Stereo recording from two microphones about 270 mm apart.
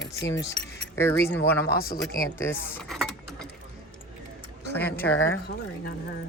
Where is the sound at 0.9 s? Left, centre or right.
Centre.